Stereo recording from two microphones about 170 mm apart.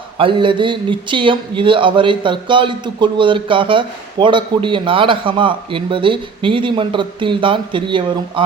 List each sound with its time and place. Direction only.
0.2 s speech: 30° right (ahead or behind)